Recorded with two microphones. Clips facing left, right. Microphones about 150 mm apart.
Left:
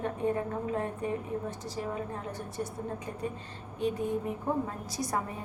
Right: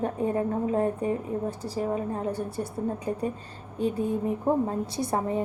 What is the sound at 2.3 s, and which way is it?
Speech, 30° right (ahead or behind).